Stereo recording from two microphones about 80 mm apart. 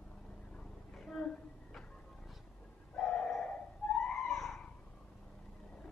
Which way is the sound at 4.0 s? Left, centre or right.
Centre.